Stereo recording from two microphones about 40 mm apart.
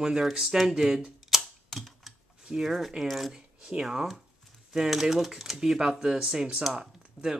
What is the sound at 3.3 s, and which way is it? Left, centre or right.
Speech, centre.